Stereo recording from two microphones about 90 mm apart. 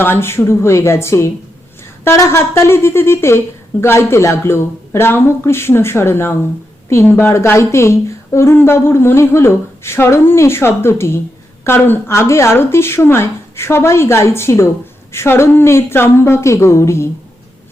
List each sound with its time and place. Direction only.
0.0 s a woman's voice: 25° left (ahead or behind)